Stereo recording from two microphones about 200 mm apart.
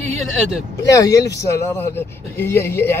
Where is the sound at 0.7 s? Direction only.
15° left (ahead or behind).